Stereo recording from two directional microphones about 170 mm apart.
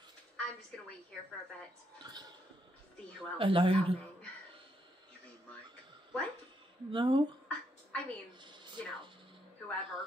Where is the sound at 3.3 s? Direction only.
30° right (ahead or behind).